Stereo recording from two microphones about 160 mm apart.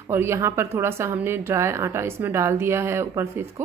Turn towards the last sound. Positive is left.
turn(degrees=-15)  # may be behind; listen again after turning